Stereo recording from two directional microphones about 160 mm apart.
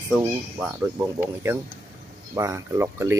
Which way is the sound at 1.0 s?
15° right (ahead or behind).